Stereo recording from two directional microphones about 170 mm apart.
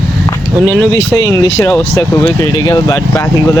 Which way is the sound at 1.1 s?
20° left (ahead or behind).